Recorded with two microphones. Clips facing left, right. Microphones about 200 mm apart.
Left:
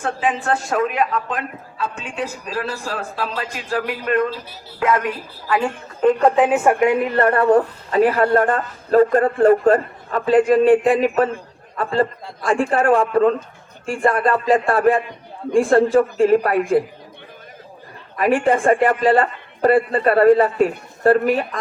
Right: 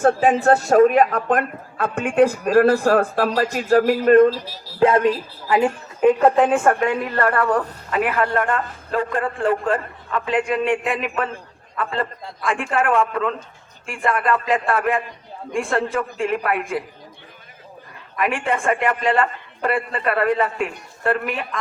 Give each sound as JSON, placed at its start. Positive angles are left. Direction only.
{"t": 0.0, "sound": "speech", "side_deg": -45}
{"t": 4.8, "sound": "a man's voice", "side_deg": -30}
{"t": 6.0, "sound": "speech", "side_deg": -5}
{"t": 18.2, "sound": "speech", "side_deg": 35}